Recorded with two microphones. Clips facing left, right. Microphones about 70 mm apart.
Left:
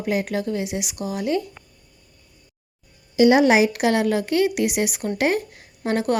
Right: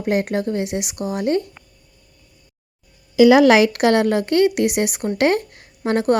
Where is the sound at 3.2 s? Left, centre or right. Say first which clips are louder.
Right 4 dB; right.